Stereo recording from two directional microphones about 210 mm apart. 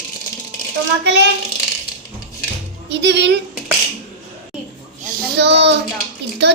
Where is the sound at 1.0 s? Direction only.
55° right (ahead or behind).